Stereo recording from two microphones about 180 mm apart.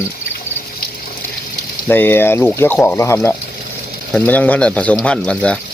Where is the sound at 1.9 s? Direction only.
10° left (ahead or behind).